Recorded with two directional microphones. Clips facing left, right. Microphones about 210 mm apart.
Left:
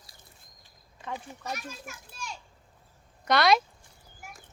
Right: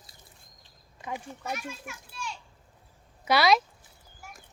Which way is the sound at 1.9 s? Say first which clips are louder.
Right 3 dB; 45° left (ahead or behind).